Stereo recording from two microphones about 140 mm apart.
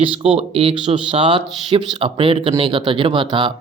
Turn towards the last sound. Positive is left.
turn(degrees=-35)  # may be behind; listen again after turning